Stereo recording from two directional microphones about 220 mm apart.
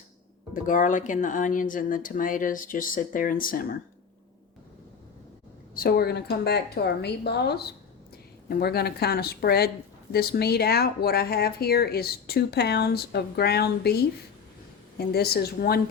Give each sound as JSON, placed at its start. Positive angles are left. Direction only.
{"t": 0.5, "sound": "speech", "side_deg": 40}
{"t": 5.7, "sound": "speech", "side_deg": 45}